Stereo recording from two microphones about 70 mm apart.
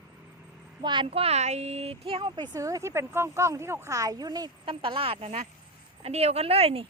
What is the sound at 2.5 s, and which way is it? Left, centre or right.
A woman's voice, right.